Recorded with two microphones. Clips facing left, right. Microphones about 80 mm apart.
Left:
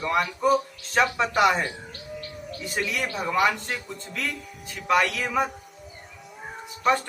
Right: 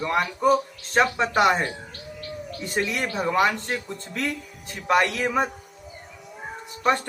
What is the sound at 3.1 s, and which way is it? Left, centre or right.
Speech, right.